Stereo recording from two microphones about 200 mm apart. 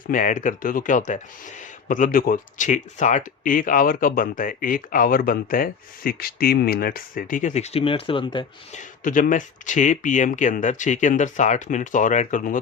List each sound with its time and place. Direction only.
0.1 s speech: 40° left (ahead or behind); by 8.4 s 25° left (ahead or behind)
8.7 s speech: 40° left (ahead or behind)